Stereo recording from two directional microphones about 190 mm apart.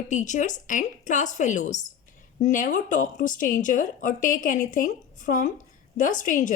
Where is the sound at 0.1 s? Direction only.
40° left (ahead or behind).